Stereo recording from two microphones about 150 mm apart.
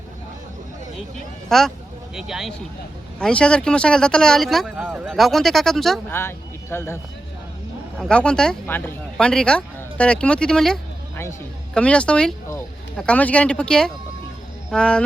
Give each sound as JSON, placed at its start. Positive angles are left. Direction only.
{"t": 1.5, "sound": "speech", "side_deg": 0}
{"t": 6.1, "sound": "speech", "side_deg": 15}
{"t": 7.9, "sound": "speech", "side_deg": 5}